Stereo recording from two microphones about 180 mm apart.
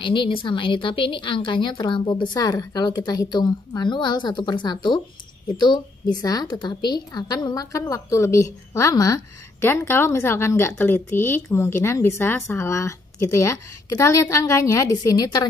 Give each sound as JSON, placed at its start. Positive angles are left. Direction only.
{"t": 0.0, "sound": "a woman's voice", "side_deg": 25}